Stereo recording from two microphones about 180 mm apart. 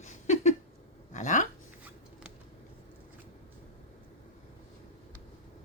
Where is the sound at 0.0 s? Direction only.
40° left (ahead or behind).